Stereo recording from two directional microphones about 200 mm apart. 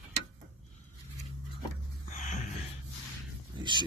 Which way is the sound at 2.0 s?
40° left (ahead or behind).